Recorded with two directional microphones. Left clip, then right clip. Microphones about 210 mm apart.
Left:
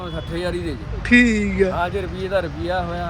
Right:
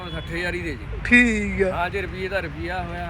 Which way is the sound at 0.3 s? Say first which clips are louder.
Left 1 dB; 5° left (ahead or behind).